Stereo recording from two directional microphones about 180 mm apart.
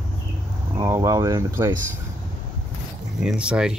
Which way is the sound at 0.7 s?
15° right (ahead or behind).